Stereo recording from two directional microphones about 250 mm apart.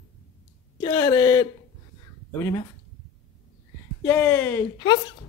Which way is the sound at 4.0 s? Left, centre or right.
Centre.